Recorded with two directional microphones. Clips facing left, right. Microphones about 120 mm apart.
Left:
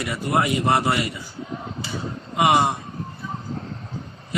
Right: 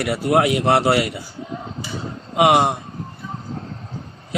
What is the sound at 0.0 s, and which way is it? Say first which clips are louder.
A man's voice: right 5 dB; 75° right (ahead or behind).